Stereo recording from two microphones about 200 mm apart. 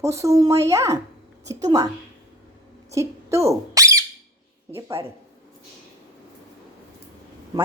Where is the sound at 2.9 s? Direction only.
15° right (ahead or behind).